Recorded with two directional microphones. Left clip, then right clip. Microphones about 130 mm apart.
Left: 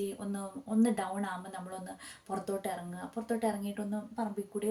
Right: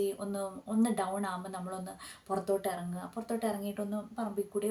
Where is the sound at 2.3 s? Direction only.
25° right (ahead or behind).